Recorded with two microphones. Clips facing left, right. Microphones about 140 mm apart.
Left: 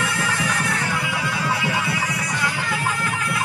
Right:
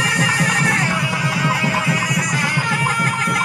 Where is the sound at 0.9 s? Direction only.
40° right (ahead or behind).